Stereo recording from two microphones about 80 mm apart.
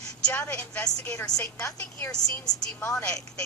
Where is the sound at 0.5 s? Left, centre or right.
Centre.